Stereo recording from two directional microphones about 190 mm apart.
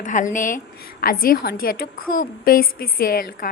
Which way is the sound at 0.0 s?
40° left (ahead or behind).